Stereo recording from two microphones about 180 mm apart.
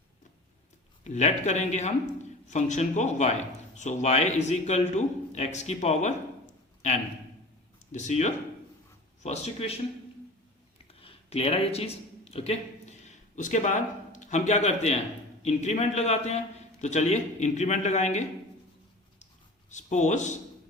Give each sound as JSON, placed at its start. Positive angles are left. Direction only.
{"t": 1.0, "sound": "a man's voice", "side_deg": 40}
{"t": 7.9, "sound": "a man's voice", "side_deg": 40}
{"t": 11.0, "sound": "a sound", "side_deg": 35}
{"t": 15.4, "sound": "a man's voice", "side_deg": 40}
{"t": 19.7, "sound": "a man's voice", "side_deg": 40}